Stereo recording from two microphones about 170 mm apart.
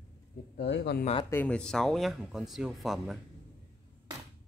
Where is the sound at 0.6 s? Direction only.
85° left.